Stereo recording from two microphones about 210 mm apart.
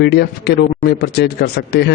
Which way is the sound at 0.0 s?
50° left (ahead or behind).